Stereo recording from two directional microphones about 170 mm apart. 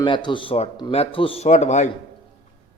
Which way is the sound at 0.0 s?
30° left (ahead or behind).